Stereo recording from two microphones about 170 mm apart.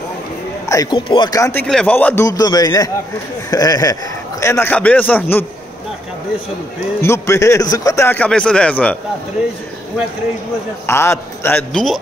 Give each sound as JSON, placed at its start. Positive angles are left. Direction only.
{"t": 0.7, "sound": "speech", "side_deg": 25}
{"t": 7.0, "sound": "speech", "side_deg": 15}
{"t": 10.9, "sound": "speech", "side_deg": 15}